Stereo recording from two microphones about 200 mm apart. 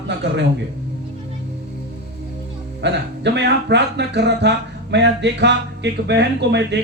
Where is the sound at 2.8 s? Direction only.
60° right (ahead or behind).